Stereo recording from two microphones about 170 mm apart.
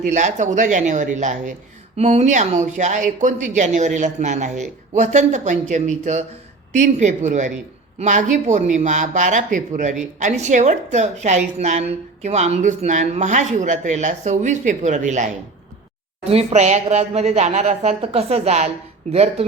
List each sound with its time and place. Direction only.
0.0 s a woman's voice: 45° right (ahead or behind)